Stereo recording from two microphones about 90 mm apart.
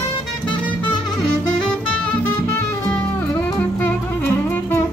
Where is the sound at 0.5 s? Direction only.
65° left (ahead or behind).